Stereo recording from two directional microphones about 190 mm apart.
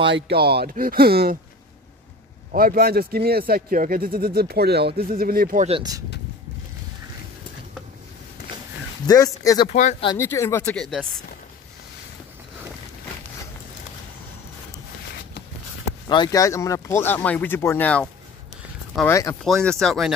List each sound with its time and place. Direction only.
0.1 s speech: 55° right (ahead or behind)
2.5 s speech: 50° right (ahead or behind)
5.7 s speech: 20° right (ahead or behind)
9.0 s speech: 20° left (ahead or behind)
9.7 s speech: 40° left (ahead or behind)
10.1 s speech: 15° left (ahead or behind)
16.1 s speech: 20° left (ahead or behind)
19.4 s speech: 5° left (ahead or behind)